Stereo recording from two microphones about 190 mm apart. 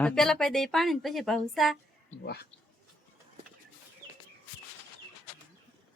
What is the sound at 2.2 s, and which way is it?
Speech, 55° left (ahead or behind).